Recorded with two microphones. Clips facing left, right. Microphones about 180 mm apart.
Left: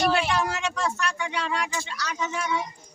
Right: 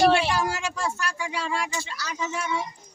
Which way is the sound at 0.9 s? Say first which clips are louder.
Left 1 dB; 5° right (ahead or behind).